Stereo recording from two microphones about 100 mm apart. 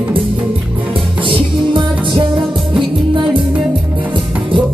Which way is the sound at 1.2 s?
55° right (ahead or behind).